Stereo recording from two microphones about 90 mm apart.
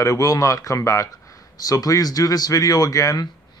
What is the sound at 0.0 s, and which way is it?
Speech, 35° left (ahead or behind).